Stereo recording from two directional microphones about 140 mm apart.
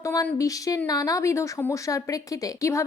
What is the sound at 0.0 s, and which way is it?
Speech, 20° left (ahead or behind).